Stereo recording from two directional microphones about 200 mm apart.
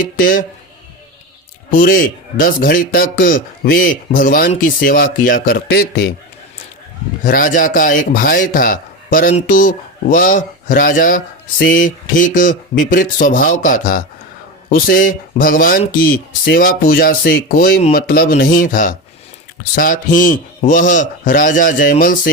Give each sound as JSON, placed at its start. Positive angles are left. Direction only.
{"t": 0.0, "sound": "a man's voice", "side_deg": 45}
{"t": 1.7, "sound": "a man's voice", "side_deg": 45}
{"t": 7.3, "sound": "a man's voice", "side_deg": 45}